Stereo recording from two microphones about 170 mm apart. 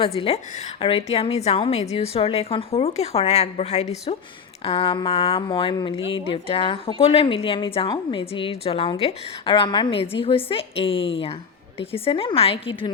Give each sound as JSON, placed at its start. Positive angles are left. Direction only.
{"t": 0.0, "sound": "a woman's voice", "side_deg": 35}